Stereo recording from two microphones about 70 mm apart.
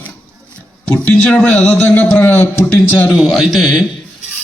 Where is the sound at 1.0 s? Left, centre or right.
Left.